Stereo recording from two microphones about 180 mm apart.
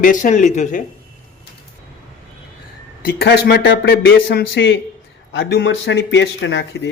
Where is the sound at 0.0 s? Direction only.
45° left (ahead or behind).